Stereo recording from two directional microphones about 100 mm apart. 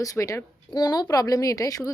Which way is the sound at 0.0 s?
35° left (ahead or behind).